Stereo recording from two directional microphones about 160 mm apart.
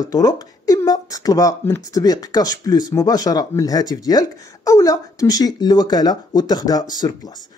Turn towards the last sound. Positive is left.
turn(degrees=25)  # may be behind; listen again after turning